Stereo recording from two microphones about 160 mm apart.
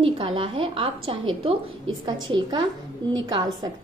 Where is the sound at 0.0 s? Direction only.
35° right (ahead or behind).